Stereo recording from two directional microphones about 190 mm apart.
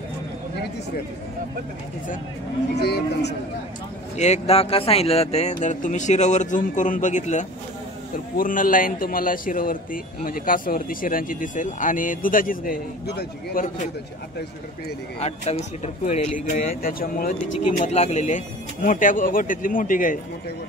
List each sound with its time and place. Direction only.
2.7 s speech: 60° left (ahead or behind)
4.2 s speech: 35° left (ahead or behind); by 13.7 s 60° left (ahead or behind)
15.1 s speech: 35° left (ahead or behind); by 17.3 s 50° left (ahead or behind)
17.7 s speech: 35° left (ahead or behind)